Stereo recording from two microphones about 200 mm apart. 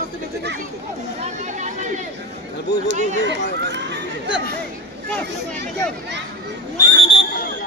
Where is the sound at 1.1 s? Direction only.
35° right (ahead or behind).